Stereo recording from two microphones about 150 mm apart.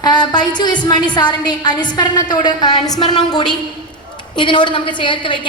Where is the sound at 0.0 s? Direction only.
30° left (ahead or behind).